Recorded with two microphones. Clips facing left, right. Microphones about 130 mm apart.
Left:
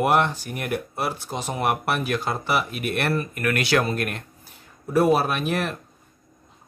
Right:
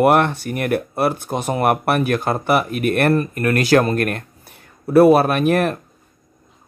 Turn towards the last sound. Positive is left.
turn(degrees=-55)  # may be behind; listen again after turning